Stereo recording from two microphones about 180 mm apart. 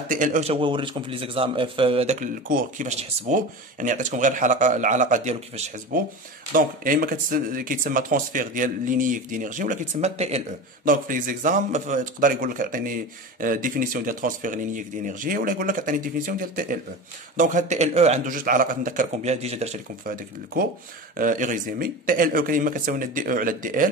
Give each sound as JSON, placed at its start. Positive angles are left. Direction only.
{"t": 0.1, "sound": "a man's voice", "side_deg": -45}
{"t": 5.9, "sound": "speech", "side_deg": -50}
{"t": 10.9, "sound": "speech", "side_deg": -50}
{"t": 21.2, "sound": "speech", "side_deg": -45}